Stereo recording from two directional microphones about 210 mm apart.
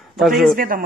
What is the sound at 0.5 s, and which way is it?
Speech, 40° right (ahead or behind).